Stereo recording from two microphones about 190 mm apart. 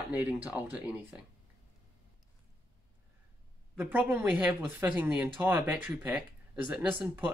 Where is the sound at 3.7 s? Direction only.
10° right (ahead or behind).